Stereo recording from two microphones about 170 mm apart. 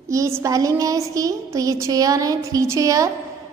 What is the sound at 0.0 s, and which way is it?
A woman's voice, 15° right (ahead or behind).